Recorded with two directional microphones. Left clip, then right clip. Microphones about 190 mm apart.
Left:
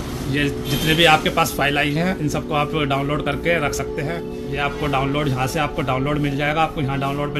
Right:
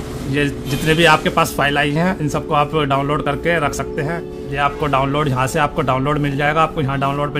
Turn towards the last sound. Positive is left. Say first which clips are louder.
# right 4 dB
turn(degrees=-40)  # may be behind; listen again after turning